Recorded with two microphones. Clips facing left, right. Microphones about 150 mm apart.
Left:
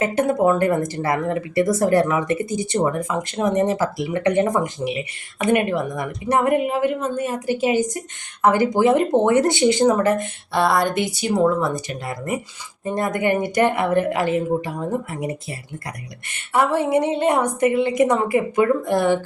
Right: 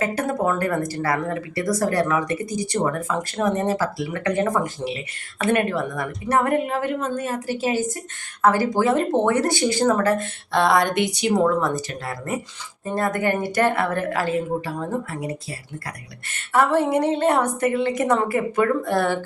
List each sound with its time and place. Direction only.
0.0 s a woman's voice: 25° left (ahead or behind)
10.5 s a woman's voice: 5° left (ahead or behind)